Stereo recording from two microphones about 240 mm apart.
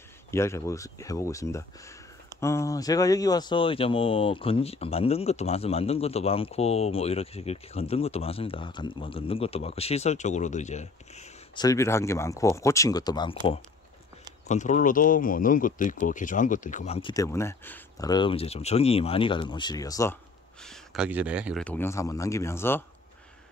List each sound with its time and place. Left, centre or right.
0.3 s speech: centre; by 11.6 s left
11.6 s speech: centre
14.5 s speech: left; by 20.2 s centre
20.6 s speech: centre
21.6 s speech: centre